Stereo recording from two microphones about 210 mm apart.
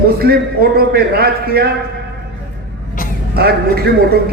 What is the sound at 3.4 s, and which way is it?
Speech, 50° right (ahead or behind).